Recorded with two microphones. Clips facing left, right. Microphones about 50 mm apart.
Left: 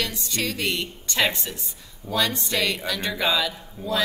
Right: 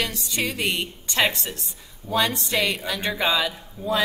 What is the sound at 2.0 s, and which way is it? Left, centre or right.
Speech, left.